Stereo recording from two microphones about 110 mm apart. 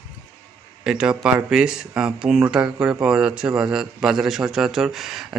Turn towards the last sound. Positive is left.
turn(degrees=0)  # may be behind; listen again after turning